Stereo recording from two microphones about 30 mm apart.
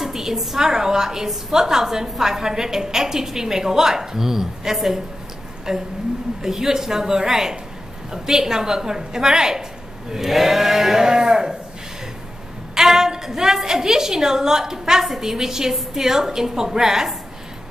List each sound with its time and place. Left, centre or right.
0.0 s a sound: centre
0.6 s a woman's voice: centre
11.1 s a woman's voice: right
12.7 s a woman's voice: centre